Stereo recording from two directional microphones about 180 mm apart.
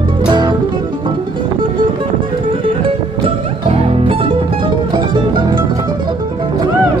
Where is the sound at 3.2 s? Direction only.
30° right (ahead or behind).